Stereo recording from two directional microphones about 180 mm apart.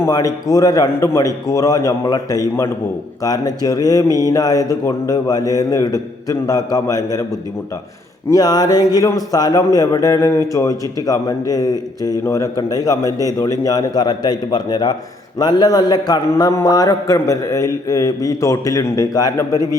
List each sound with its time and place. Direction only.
0.0 s a man's voice: 20° left (ahead or behind)
8.4 s a man's voice: 20° left (ahead or behind)
13.1 s a man's voice: 20° right (ahead or behind)
13.7 s a man's voice: 20° left (ahead or behind)